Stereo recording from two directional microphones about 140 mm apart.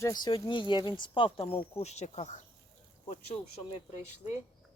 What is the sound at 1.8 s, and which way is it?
Speech, 50° left (ahead or behind).